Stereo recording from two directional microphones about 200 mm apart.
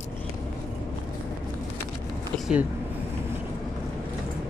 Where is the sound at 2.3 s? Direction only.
Centre (ahead or behind).